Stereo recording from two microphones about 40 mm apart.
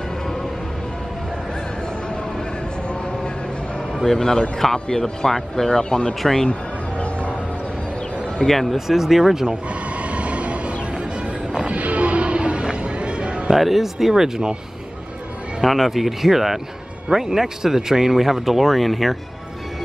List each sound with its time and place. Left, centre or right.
4.0 s speech: centre
8.5 s speech: centre
8.7 s speech: centre
10.0 s train: right
11.5 s music: right
13.5 s speech: centre
15.6 s speech: centre